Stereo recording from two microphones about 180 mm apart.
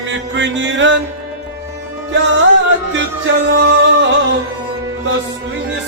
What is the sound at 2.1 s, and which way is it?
Music, 85° right.